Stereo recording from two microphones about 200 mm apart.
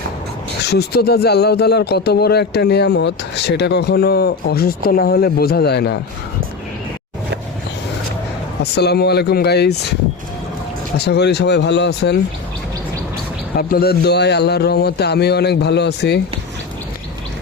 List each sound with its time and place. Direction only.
0.6 s speech: 55° left (ahead or behind)
8.6 s speech: 55° left (ahead or behind)
10.9 s speech: 55° left (ahead or behind)
13.6 s speech: 50° left (ahead or behind)